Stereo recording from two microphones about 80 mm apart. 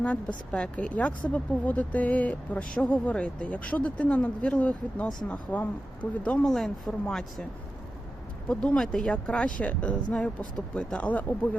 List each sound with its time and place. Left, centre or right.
0.5 s speech: centre
6.4 s speech: centre
8.4 s speech: centre